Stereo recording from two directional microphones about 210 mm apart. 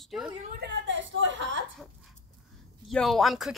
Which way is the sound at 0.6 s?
60° right (ahead or behind).